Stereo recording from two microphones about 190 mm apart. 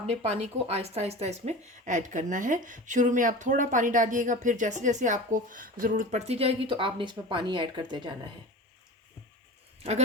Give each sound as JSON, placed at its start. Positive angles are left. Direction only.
{"t": 0.1, "sound": "speech", "side_deg": -35}